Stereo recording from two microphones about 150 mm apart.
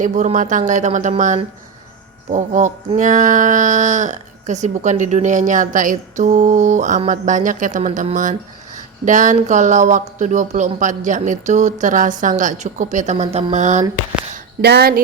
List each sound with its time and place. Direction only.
0.0 s speech: 50° right (ahead or behind)
2.3 s speech: 55° right (ahead or behind)
14.6 s speech: 90° right